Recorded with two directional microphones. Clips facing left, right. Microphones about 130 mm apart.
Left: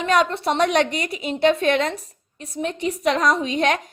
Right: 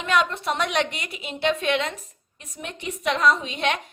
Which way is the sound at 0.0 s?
35° left (ahead or behind).